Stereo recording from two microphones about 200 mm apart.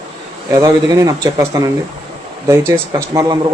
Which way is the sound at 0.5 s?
15° right (ahead or behind).